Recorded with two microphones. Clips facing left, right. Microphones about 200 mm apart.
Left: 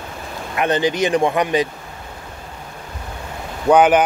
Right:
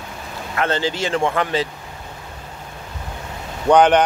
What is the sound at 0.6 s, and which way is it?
Speech, 15° left (ahead or behind).